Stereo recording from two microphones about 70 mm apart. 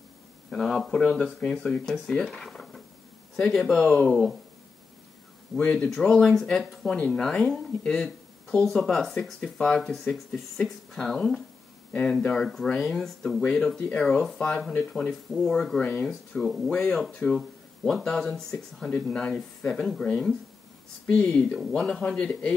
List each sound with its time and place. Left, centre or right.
0.5 s speech: centre
5.6 s speech: centre
5.9 s speech: centre
9.8 s speech: centre
15.8 s speech: centre
16.3 s speech: centre
21.5 s speech: centre